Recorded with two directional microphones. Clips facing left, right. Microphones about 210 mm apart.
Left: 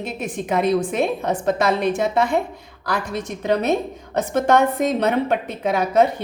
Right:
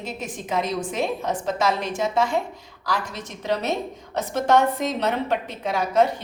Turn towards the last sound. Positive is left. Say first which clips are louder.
# left 3 dB
turn(degrees=60)  # may be behind; listen again after turning